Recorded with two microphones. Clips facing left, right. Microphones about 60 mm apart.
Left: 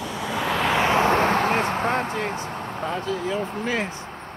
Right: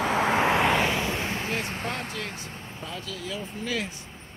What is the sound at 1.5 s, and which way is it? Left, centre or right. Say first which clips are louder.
Speech: left 9 dB; left.